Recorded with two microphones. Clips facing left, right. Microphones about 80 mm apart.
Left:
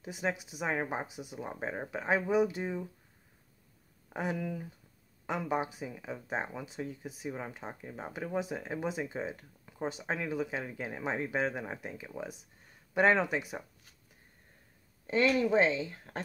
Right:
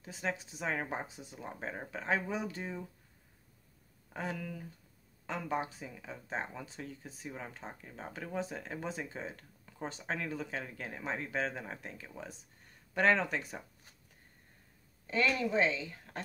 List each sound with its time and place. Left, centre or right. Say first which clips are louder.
0.0 s speech: left 3 dB; centre
4.1 s speech: left 5 dB; centre
15.0 s speech: left 5 dB; left